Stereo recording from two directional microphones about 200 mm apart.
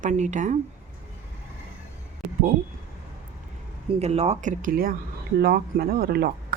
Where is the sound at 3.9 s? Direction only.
30° right (ahead or behind); by 6.3 s 50° right (ahead or behind).